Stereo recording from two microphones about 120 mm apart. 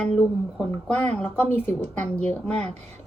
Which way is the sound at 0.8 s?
15° left (ahead or behind).